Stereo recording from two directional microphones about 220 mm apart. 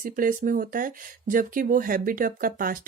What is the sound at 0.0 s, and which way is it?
Speech, 40° right (ahead or behind).